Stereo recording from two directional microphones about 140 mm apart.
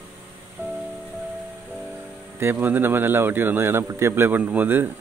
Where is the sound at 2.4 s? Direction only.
15° right (ahead or behind).